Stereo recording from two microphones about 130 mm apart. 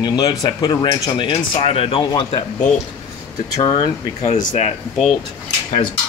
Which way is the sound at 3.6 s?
45° left (ahead or behind).